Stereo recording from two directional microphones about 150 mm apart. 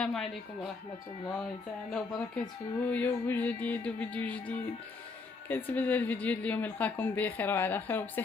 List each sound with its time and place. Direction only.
0.0 s speech: centre (ahead or behind)
1.9 s speech: centre (ahead or behind)
2.9 s speech: 10° left (ahead or behind)